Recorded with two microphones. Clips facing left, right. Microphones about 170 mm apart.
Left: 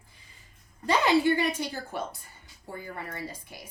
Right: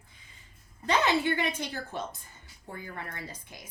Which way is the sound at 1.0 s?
10° left (ahead or behind).